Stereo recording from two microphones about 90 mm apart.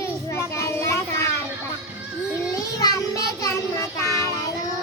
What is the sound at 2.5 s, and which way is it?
Child singing, 40° left (ahead or behind).